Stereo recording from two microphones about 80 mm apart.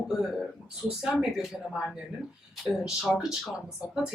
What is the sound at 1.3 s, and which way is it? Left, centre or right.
Speech, centre.